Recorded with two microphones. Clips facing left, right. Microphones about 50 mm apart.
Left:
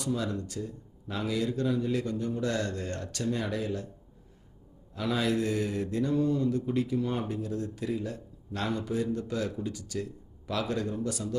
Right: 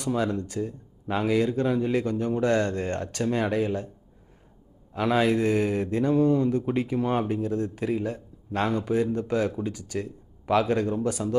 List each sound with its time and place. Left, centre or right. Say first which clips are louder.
0.0 s speech: right 5 dB; right
4.9 s speech: right 6 dB; right